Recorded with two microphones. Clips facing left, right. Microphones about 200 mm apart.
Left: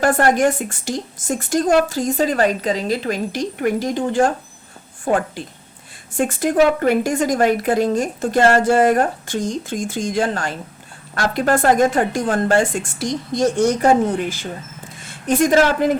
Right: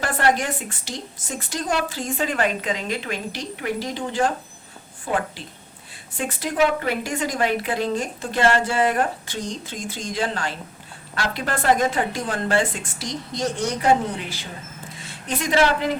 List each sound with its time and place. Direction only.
0.0 s a woman's voice: 45° left (ahead or behind)